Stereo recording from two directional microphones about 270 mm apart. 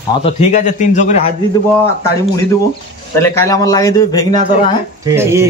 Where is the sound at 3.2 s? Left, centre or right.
Centre.